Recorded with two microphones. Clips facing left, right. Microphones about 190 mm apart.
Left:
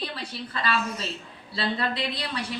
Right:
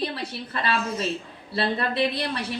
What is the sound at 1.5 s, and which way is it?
Speech, 60° right (ahead or behind).